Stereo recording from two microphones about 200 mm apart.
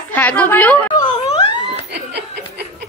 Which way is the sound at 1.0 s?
25° left (ahead or behind).